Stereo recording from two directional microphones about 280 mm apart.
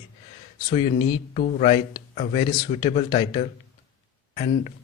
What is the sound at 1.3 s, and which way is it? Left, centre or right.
A man's voice, left.